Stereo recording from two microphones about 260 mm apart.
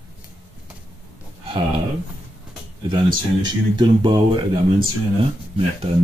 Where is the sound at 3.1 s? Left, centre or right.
Centre.